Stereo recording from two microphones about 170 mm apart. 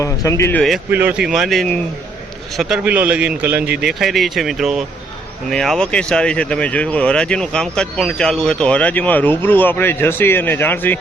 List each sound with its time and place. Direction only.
0.0 s speech: 20° left (ahead or behind)
0.9 s a man's voice: 10° right (ahead or behind); by 11.0 s 10° left (ahead or behind)